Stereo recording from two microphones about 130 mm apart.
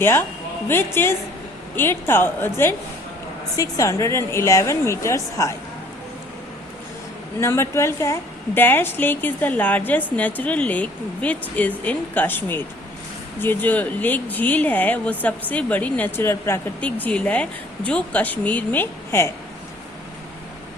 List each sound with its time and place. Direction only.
0.0 s a woman's voice: 20° left (ahead or behind)
7.3 s a woman's voice: 20° left (ahead or behind)